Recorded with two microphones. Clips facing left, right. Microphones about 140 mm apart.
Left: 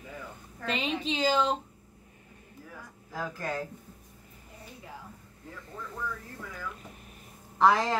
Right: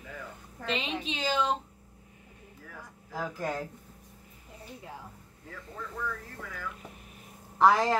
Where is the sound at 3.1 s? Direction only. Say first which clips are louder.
Right 1 dB; 15° right (ahead or behind).